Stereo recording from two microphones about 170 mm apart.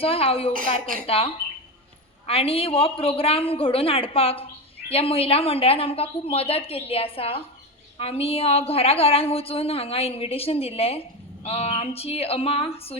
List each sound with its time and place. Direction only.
0.0 s a woman's voice: 35° left (ahead or behind)